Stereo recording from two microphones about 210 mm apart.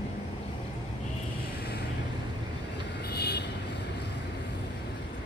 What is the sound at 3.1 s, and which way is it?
Vehicle, 50° left (ahead or behind).